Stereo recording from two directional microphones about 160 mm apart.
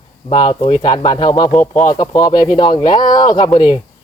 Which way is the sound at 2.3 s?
35° left (ahead or behind).